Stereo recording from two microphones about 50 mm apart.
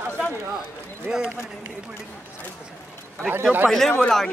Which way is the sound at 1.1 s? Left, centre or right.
Centre.